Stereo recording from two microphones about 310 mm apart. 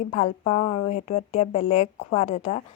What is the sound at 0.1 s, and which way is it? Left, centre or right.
Speech, centre.